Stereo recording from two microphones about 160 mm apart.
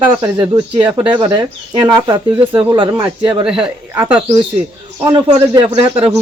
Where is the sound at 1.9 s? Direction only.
25° right (ahead or behind).